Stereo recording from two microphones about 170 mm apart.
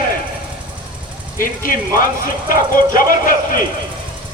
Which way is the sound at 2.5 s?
55° left (ahead or behind).